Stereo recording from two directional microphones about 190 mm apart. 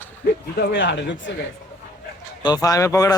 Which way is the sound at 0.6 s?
65° left (ahead or behind).